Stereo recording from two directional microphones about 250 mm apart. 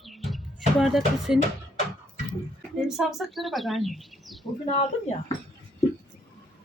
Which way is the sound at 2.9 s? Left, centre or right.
Centre.